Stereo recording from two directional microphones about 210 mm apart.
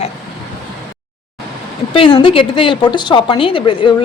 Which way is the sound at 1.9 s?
25° left (ahead or behind).